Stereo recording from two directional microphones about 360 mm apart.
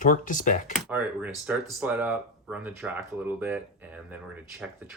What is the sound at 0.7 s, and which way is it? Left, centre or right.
Speech, centre.